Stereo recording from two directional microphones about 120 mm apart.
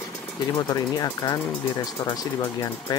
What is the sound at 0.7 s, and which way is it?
Speech, 35° left (ahead or behind).